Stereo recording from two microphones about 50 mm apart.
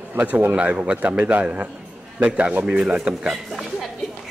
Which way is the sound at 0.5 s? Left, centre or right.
Right.